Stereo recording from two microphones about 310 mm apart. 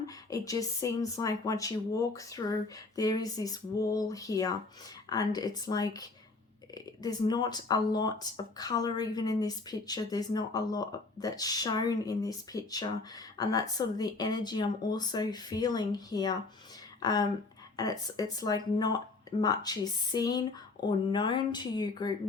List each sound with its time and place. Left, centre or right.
0.0 s speech: centre